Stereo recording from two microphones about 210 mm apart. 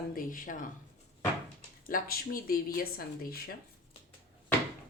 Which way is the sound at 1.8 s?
45° left (ahead or behind).